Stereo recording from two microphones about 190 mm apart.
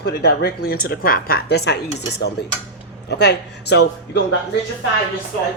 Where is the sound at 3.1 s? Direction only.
60° left (ahead or behind).